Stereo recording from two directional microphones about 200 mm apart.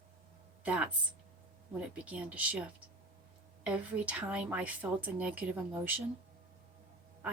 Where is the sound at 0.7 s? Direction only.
5° right (ahead or behind).